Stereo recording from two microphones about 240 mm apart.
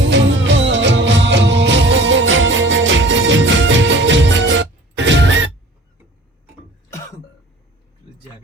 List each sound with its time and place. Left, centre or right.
0.0 s music: right